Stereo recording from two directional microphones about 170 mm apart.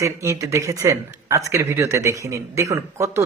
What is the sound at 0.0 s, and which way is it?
Speech, 15° right (ahead or behind).